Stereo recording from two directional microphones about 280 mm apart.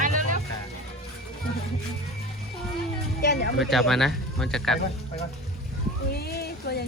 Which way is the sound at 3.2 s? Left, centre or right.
Left.